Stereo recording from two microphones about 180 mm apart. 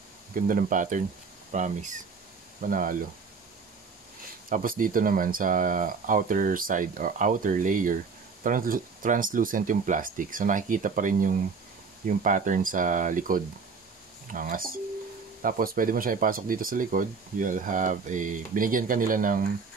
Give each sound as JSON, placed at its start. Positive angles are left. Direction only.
{"t": 0.5, "sound": "speech", "side_deg": -50}
{"t": 4.5, "sound": "speech", "side_deg": -50}